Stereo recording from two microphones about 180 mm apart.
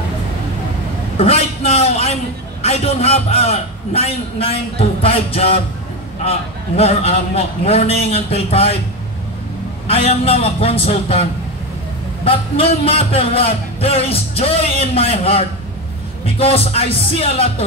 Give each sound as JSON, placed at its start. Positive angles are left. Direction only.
{"t": 1.1, "sound": "a sound", "side_deg": 35}
{"t": 2.6, "sound": "speech", "side_deg": 35}
{"t": 9.8, "sound": "speech", "side_deg": 30}
{"t": 12.3, "sound": "speech", "side_deg": 30}